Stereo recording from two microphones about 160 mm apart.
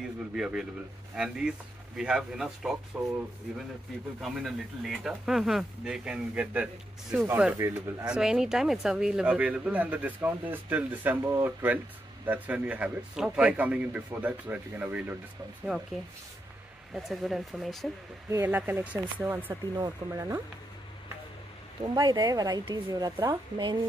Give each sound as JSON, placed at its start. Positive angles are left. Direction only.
{"t": 0.4, "sound": "speech", "side_deg": -5}
{"t": 4.2, "sound": "speech", "side_deg": 0}
{"t": 8.1, "sound": "speech", "side_deg": -5}
{"t": 18.3, "sound": "speech", "side_deg": -15}
{"t": 21.8, "sound": "speech", "side_deg": -25}